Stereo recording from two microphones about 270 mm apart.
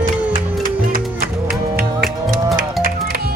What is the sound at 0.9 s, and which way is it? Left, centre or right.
Music, right.